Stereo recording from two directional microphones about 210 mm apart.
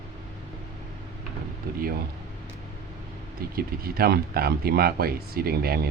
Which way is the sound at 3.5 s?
45° right (ahead or behind).